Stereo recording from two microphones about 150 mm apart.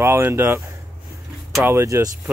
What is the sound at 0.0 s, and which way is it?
Speech, 15° right (ahead or behind).